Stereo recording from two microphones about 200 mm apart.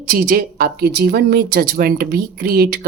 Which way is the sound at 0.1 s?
45° right (ahead or behind).